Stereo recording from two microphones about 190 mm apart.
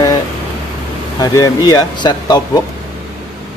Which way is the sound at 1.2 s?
20° left (ahead or behind).